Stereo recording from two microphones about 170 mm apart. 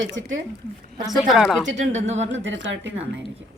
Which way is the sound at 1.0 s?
Centre (ahead or behind).